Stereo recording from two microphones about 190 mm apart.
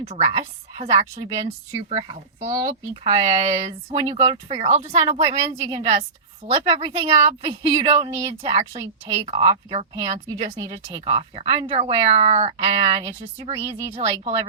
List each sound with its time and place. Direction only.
0.0 s a woman's voice: 30° right (ahead or behind)